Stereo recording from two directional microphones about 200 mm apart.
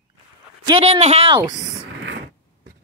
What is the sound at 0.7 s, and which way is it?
Speech, 30° right (ahead or behind).